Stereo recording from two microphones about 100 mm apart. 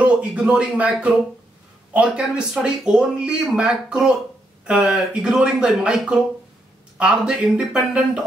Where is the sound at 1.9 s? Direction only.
10° right (ahead or behind).